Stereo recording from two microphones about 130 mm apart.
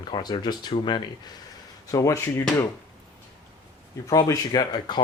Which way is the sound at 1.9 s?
25° left (ahead or behind).